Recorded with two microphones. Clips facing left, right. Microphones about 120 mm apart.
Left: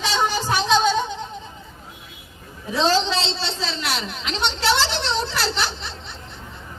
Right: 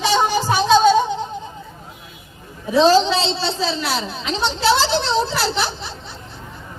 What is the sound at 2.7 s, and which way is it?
A woman's voice, 10° right (ahead or behind).